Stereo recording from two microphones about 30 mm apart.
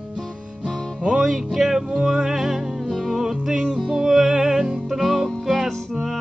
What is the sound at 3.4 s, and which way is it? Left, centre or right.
Music, right.